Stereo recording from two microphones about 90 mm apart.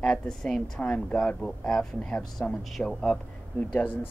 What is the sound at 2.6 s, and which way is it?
Speech, 5° left (ahead or behind).